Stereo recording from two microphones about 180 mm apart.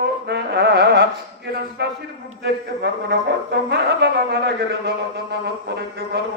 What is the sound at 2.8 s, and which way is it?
Speech, 65° right (ahead or behind).